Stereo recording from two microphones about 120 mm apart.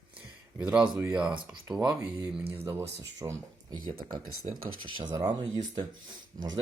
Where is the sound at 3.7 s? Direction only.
35° right (ahead or behind).